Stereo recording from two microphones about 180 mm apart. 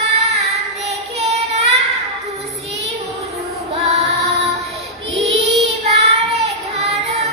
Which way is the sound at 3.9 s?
35° right (ahead or behind).